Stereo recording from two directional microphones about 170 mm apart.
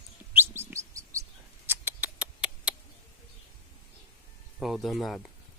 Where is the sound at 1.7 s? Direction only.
10° right (ahead or behind).